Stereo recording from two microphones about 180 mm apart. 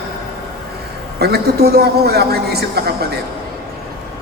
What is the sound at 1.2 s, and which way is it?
A man's voice, 60° right (ahead or behind).